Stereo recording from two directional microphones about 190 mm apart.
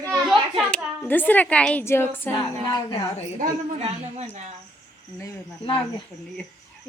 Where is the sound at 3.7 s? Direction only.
35° right (ahead or behind).